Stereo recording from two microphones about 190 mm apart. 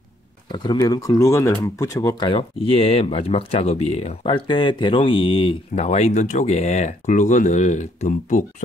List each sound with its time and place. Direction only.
0.5 s speech: 20° left (ahead or behind); by 8.6 s 40° left (ahead or behind)